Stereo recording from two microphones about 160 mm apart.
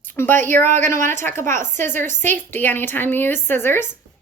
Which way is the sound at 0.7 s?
50° right (ahead or behind).